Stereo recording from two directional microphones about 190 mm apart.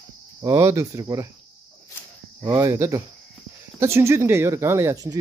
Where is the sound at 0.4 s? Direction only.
20° right (ahead or behind).